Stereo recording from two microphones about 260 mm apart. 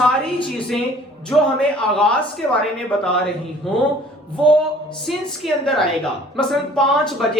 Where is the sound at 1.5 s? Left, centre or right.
Centre.